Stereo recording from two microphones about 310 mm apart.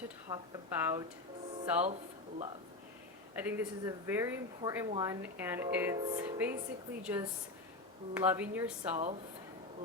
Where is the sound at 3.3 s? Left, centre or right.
Centre.